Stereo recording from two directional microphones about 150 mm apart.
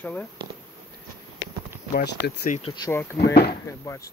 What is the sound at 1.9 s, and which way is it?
Speech, 80° left.